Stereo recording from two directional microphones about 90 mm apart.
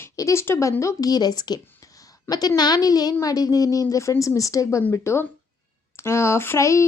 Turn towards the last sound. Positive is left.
turn(degrees=30)  # may be behind; listen again after turning